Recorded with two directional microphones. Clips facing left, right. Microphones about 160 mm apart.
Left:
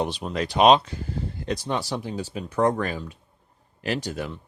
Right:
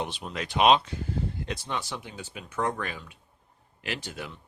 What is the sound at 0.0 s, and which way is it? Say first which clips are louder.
Speech: left 7 dB; 40° left (ahead or behind).